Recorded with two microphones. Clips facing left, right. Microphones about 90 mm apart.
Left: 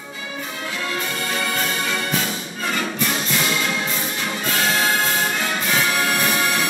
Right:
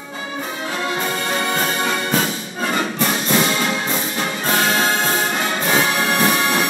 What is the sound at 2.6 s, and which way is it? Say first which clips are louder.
Music: right 4 dB; 35° right (ahead or behind).